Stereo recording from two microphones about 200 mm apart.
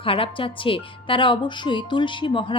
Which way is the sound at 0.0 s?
25° left (ahead or behind).